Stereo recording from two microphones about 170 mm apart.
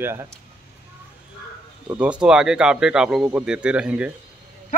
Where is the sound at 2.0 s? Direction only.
5° right (ahead or behind).